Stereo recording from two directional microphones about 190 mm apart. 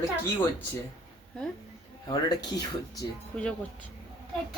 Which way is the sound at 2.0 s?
20° left (ahead or behind).